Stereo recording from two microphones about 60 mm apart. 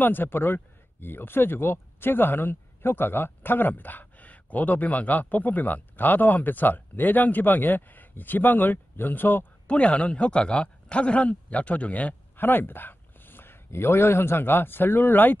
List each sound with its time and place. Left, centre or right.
0.0 s speech: left
9.7 s speech: centre